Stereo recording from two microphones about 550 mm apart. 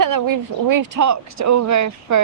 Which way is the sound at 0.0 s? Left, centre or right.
Right.